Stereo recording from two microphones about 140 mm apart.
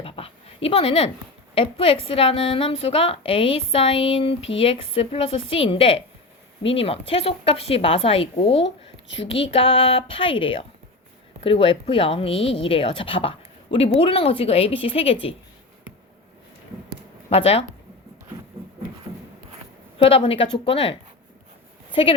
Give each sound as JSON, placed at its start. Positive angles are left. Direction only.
{"t": 0.0, "sound": "dog", "side_deg": 40}
{"t": 1.5, "sound": "a woman's voice", "side_deg": 40}
{"t": 17.2, "sound": "speech", "side_deg": 45}
{"t": 20.0, "sound": "a woman's voice", "side_deg": 40}